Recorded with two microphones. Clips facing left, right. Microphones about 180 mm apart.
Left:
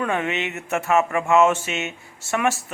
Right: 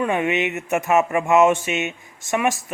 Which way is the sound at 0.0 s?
15° right (ahead or behind).